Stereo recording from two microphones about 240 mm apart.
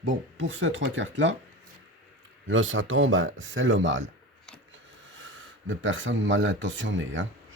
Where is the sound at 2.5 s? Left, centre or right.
Right.